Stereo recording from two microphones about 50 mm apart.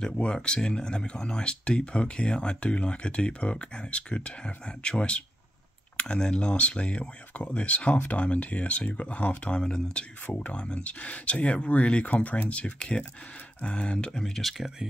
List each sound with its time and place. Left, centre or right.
0.0 s speech: centre
14.2 s speech: centre